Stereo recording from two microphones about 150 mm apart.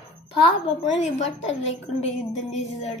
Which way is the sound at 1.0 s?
50° left (ahead or behind).